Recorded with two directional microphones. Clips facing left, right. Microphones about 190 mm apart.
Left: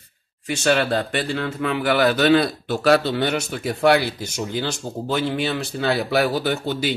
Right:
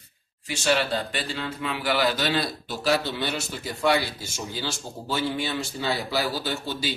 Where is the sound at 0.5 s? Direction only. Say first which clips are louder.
Left 5 dB; 60° left (ahead or behind).